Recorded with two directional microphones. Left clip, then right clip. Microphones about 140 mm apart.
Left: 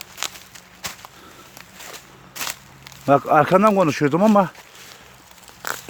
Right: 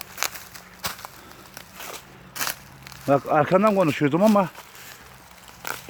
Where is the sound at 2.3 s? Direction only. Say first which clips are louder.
Even; 20° left (ahead or behind).